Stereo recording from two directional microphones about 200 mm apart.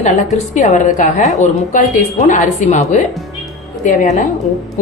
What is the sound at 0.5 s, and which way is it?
A woman's voice, 35° left (ahead or behind).